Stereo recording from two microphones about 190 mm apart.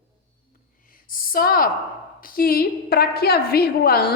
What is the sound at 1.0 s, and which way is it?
A woman's voice, 50° left (ahead or behind).